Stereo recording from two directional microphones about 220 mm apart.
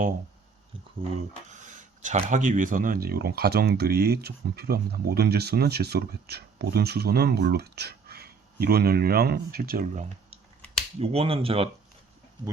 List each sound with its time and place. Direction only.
1.5 s speech: 35° right (ahead or behind)